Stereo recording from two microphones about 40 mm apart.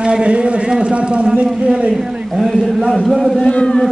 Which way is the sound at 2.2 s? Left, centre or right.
Centre.